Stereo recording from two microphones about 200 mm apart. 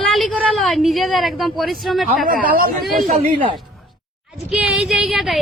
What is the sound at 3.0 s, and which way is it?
Speech, 25° right (ahead or behind).